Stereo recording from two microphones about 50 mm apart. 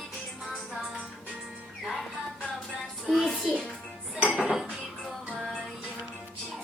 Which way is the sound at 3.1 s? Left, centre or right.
Centre.